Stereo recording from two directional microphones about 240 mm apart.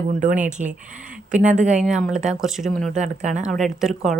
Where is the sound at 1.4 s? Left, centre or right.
Centre.